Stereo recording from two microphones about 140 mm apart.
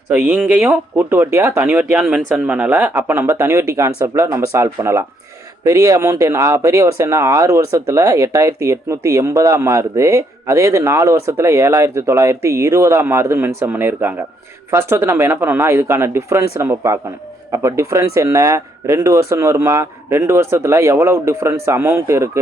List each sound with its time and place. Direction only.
0.3 s speech: 10° right (ahead or behind)